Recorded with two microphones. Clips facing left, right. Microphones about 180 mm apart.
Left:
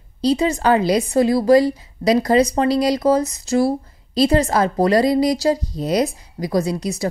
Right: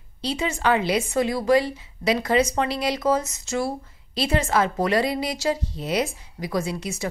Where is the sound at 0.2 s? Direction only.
40° left (ahead or behind).